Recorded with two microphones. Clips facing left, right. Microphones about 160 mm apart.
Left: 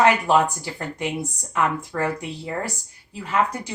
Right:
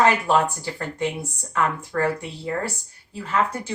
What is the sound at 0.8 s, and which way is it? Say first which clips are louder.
A woman's voice: even; 15° left (ahead or behind).